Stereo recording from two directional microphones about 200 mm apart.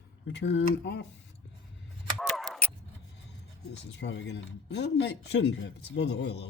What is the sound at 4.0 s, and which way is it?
Speech, 60° left (ahead or behind).